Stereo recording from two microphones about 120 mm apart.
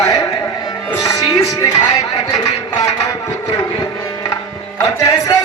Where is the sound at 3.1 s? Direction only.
25° left (ahead or behind).